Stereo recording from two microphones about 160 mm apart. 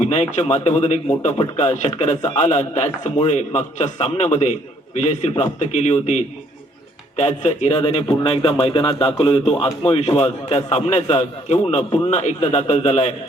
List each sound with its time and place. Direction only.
0.0 s a man's voice: 45° left (ahead or behind)
12.1 s speech: 45° left (ahead or behind)